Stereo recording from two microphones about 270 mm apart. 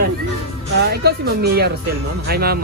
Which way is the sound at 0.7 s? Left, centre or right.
Right.